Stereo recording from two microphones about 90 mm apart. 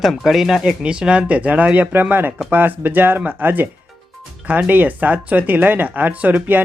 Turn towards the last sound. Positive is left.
turn(degrees=-20)  # may be behind; listen again after turning